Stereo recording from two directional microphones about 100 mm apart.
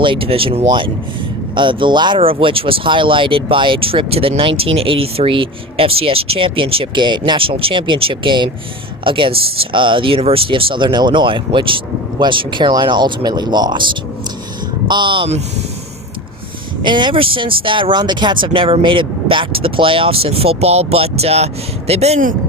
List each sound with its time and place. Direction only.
0.0 s speech: 60° right (ahead or behind)
1.5 s speech: 55° right (ahead or behind)
14.8 s speech: 50° right (ahead or behind)
16.8 s speech: 50° right (ahead or behind); by 22.2 s 90° right